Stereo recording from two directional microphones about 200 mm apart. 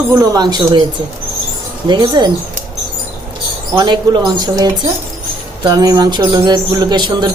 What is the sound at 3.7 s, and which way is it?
Speech, 20° right (ahead or behind).